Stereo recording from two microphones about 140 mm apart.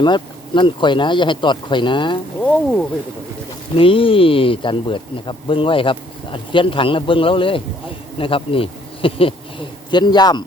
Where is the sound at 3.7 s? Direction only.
40° left (ahead or behind).